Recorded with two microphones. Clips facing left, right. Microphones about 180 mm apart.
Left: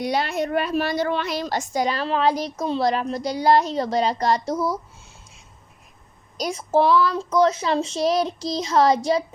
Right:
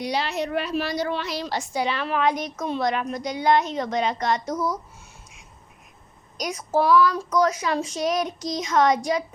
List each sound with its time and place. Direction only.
0.0 s a woman's voice: 50° left (ahead or behind); by 4.8 s 30° left (ahead or behind)
6.3 s a woman's voice: 30° left (ahead or behind)